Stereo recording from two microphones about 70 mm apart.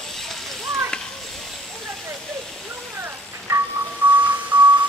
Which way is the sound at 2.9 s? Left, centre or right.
Right.